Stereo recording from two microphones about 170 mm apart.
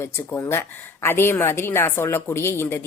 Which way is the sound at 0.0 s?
15° left (ahead or behind).